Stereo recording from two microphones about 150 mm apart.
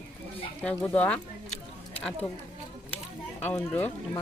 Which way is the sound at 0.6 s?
5° left (ahead or behind).